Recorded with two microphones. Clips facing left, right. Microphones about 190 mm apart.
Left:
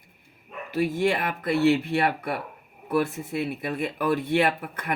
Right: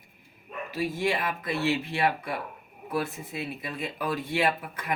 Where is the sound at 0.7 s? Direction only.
55° left (ahead or behind).